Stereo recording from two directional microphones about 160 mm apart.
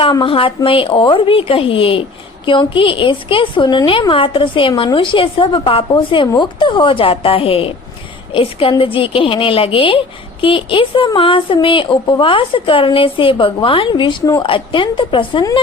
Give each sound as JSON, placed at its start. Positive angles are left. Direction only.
{"t": 0.0, "sound": "speech", "side_deg": 30}